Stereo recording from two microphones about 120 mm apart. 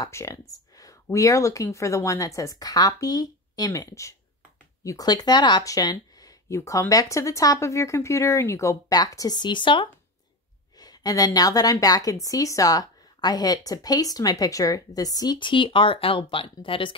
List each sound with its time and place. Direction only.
0.0 s a woman's voice: 25° left (ahead or behind); by 16.9 s 45° left (ahead or behind)